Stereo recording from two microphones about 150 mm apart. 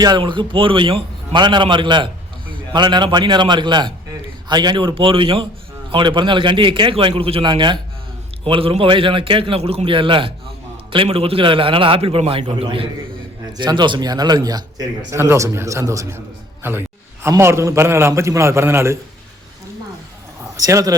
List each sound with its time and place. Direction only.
0.0 s a man's voice: 30° right (ahead or behind)
17.2 s a man's voice: 20° right (ahead or behind)
20.6 s a man's voice: 25° right (ahead or behind)